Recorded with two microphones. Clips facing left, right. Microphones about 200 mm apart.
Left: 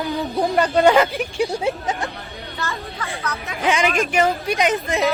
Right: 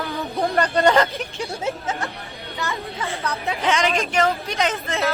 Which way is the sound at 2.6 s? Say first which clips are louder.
Right 1 dB; 15° right (ahead or behind).